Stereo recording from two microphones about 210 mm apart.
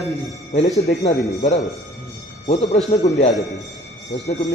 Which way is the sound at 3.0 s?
30° left (ahead or behind).